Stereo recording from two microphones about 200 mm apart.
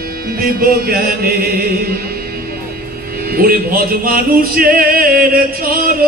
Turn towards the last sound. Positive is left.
turn(degrees=-45)  # may be behind; listen again after turning